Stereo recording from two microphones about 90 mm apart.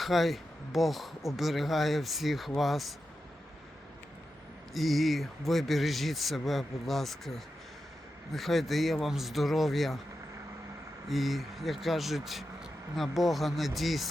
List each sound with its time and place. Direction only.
0.0 s speech: centre (ahead or behind)
4.7 s speech: centre (ahead or behind)
11.1 s speech: centre (ahead or behind)